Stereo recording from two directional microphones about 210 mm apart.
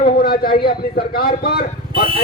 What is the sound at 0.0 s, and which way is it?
A man's voice, 45° left (ahead or behind).